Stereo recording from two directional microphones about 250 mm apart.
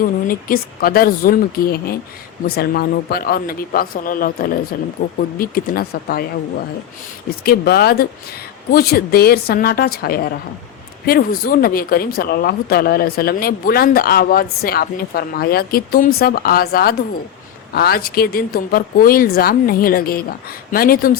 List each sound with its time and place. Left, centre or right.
0.0 s speech: left
7.3 s speech: left